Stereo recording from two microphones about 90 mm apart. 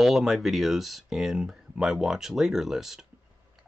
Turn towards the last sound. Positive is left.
turn(degrees=-5)  # may be behind; listen again after turning